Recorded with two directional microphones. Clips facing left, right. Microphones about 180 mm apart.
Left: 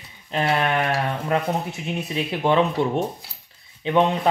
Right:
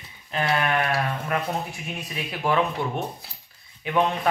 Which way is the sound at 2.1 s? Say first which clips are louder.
Left 4 dB; 25° left (ahead or behind).